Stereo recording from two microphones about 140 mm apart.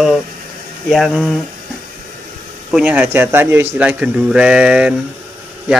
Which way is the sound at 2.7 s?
10° right (ahead or behind).